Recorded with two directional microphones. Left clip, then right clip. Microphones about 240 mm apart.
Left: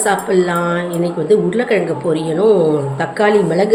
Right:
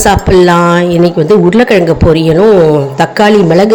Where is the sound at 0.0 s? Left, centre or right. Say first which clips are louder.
Right 8 dB; right.